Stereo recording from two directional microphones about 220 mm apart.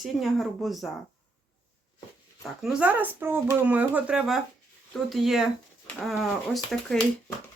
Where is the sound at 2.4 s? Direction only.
Centre (ahead or behind).